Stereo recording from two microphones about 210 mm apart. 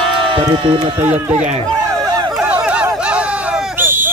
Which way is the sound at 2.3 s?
5° right (ahead or behind).